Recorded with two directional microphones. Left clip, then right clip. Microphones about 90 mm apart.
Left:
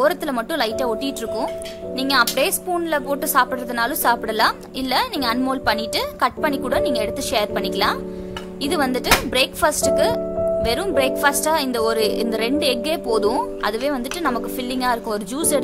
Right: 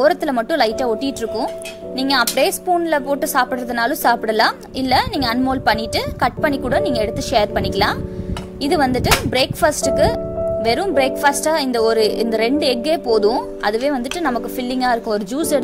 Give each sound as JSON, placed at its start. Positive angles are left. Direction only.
{"t": 0.0, "sound": "speech", "side_deg": -40}
{"t": 2.0, "sound": "a woman's voice", "side_deg": -50}
{"t": 13.1, "sound": "speech", "side_deg": -30}